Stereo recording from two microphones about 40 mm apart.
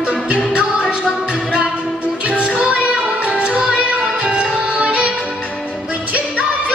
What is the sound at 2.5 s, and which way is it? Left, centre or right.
Music, right.